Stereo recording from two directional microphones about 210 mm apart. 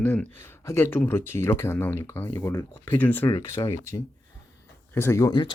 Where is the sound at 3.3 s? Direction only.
25° left (ahead or behind).